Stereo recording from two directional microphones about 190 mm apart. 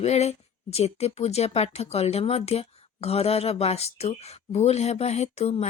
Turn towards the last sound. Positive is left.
turn(degrees=35)  # may be behind; listen again after turning